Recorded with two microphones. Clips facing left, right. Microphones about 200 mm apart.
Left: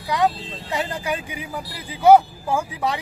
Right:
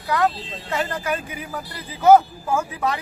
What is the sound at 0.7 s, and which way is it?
Speech, 15° left (ahead or behind).